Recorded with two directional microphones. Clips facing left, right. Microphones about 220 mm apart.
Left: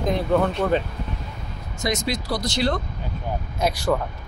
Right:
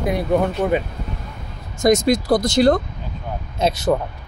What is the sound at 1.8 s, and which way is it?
Speech, 45° right (ahead or behind).